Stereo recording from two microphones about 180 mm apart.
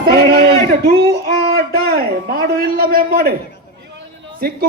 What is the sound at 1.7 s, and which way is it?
A man's voice, 60° right (ahead or behind).